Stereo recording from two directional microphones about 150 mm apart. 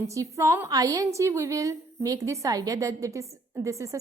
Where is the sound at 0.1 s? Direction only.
20° right (ahead or behind).